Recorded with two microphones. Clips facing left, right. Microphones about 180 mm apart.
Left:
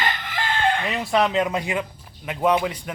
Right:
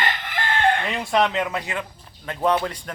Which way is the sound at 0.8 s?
5° left (ahead or behind).